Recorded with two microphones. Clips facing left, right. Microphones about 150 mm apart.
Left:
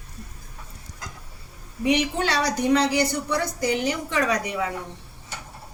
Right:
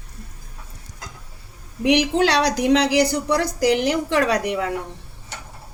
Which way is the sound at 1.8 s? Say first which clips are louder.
Right 5 dB; 70° right (ahead or behind).